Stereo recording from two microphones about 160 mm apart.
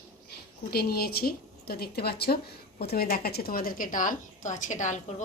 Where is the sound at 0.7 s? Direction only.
75° left (ahead or behind).